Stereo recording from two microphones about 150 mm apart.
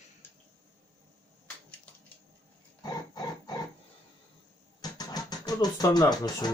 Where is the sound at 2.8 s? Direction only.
25° left (ahead or behind).